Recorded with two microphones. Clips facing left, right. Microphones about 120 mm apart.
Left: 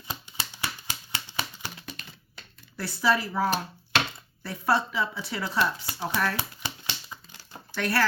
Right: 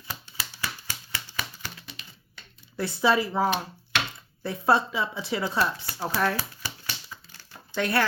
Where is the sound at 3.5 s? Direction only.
40° left (ahead or behind).